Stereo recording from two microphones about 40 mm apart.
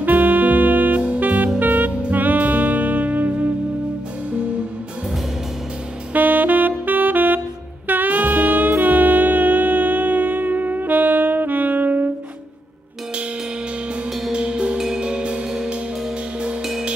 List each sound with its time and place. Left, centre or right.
0.0 s music: right
1.9 s music: right
2.1 s music: right
6.1 s saxophone: right
14.3 s music: right